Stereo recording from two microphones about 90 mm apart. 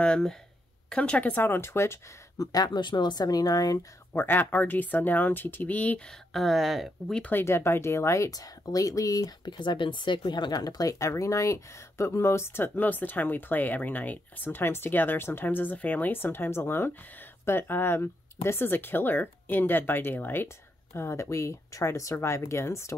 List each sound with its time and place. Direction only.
0.0 s speech: 10° left (ahead or behind); by 3.8 s 45° left (ahead or behind)
4.1 s speech: 25° left (ahead or behind)
6.3 s speech: centre (ahead or behind)
7.2 s speech: 20° left (ahead or behind); by 9.5 s 40° left (ahead or behind)
9.5 s speech: 60° left (ahead or behind); by 22.9 s 30° left (ahead or behind)